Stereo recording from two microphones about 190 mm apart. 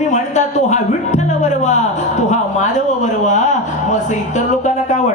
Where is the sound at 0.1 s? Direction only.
40° left (ahead or behind).